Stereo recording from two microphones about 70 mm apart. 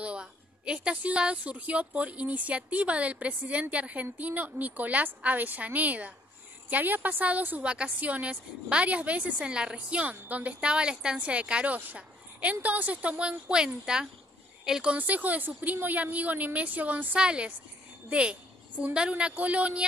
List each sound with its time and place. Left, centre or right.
0.0 s a woman's voice: centre
15.0 s a woman's voice: right
18.1 s a sound: centre
18.9 s speech: centre